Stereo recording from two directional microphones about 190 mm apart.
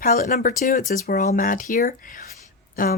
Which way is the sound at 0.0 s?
45° left (ahead or behind).